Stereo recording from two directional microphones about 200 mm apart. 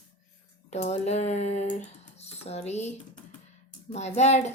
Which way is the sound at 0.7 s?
35° left (ahead or behind).